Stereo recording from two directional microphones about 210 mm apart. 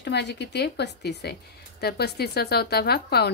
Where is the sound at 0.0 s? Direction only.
55° left (ahead or behind).